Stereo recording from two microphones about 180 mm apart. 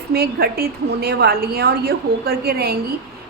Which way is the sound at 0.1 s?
60° right (ahead or behind).